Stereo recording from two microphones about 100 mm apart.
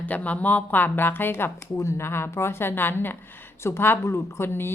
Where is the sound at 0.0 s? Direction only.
15° left (ahead or behind).